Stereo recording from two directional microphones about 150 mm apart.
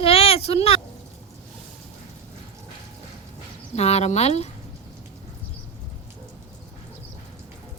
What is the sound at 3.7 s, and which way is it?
Speech, 45° left (ahead or behind).